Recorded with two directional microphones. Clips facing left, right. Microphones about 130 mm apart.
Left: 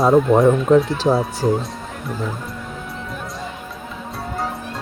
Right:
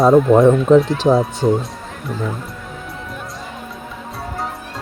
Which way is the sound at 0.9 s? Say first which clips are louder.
Right 3 dB; 15° right (ahead or behind).